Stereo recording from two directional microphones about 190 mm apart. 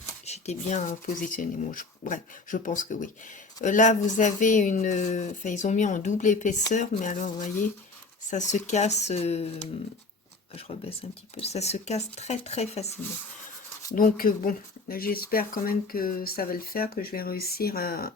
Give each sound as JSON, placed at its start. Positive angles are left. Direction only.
{"t": 0.3, "sound": "speech", "side_deg": 35}
{"t": 10.5, "sound": "speech", "side_deg": 30}
{"t": 13.9, "sound": "speech", "side_deg": 50}